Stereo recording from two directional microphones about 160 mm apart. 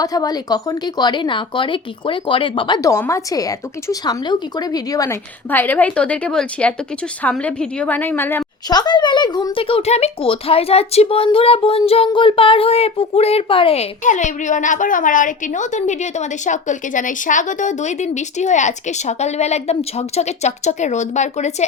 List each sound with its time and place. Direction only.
0.0 s speech: 25° left (ahead or behind)
5.5 s a woman's voice: 10° left (ahead or behind)
8.7 s a child's voice: 25° left (ahead or behind)
14.0 s a woman's voice: 50° left (ahead or behind)